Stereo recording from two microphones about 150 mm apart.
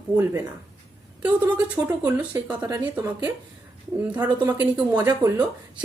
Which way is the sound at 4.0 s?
10° right (ahead or behind).